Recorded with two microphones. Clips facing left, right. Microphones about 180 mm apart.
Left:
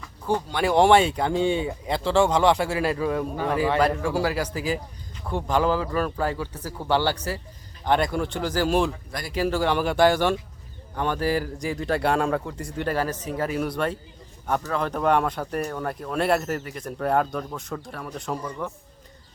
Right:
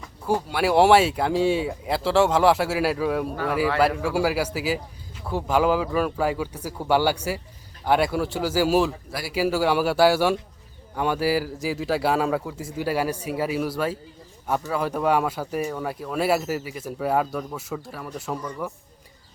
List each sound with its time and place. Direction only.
0.3 s speech: 5° right (ahead or behind)